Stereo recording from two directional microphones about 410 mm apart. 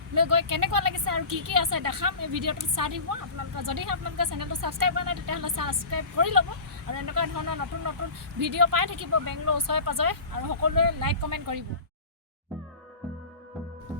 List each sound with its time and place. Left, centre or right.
0.1 s a woman's voice: right